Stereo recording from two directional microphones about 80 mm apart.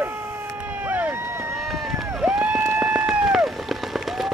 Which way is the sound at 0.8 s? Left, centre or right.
Right.